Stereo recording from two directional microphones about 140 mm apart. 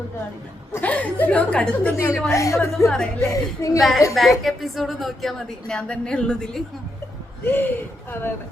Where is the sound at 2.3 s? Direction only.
20° left (ahead or behind).